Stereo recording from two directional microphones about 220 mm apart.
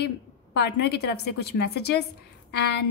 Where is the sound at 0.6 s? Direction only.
50° left (ahead or behind).